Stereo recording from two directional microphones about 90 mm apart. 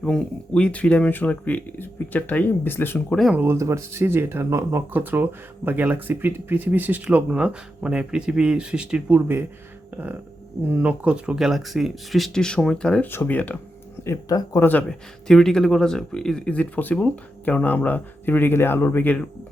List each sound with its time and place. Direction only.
0.0 s speech: 10° left (ahead or behind)
3.3 s speech: 30° right (ahead or behind)
4.9 s speech: 20° right (ahead or behind)
10.7 s speech: 20° right (ahead or behind); by 13.1 s 10° left (ahead or behind)
13.1 s speech: 20° left (ahead or behind)
14.3 s speech: 40° left (ahead or behind)
14.6 s speech: 20° left (ahead or behind)
15.3 s speech: 5° left (ahead or behind); by 19.1 s 25° left (ahead or behind)